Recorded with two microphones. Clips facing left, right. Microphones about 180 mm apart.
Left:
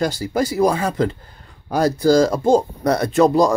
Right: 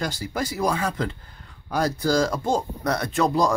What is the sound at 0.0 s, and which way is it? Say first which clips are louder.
Speech: left 8 dB; 40° left (ahead or behind).